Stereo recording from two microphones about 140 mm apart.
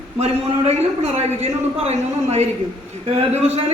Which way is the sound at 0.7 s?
50° right (ahead or behind).